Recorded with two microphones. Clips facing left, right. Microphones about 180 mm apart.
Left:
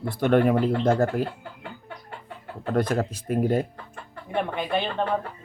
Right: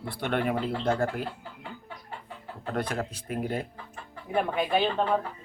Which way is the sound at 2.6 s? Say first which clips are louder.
Left 7 dB; 40° left (ahead or behind).